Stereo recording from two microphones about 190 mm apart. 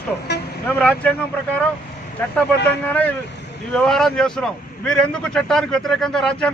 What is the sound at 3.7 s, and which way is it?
A man's voice, 5° left (ahead or behind).